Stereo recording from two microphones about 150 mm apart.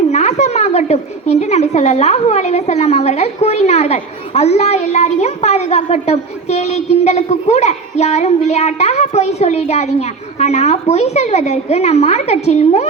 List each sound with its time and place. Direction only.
0.1 s a woman's voice: 50° left (ahead or behind)